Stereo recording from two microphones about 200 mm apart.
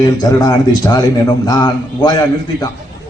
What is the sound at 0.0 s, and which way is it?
A man's voice, 20° left (ahead or behind).